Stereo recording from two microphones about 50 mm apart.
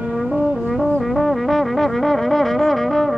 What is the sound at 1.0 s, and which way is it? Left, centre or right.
Music, centre.